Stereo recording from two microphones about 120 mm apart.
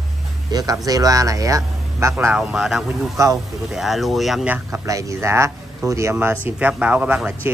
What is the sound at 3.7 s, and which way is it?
Speech, centre (ahead or behind).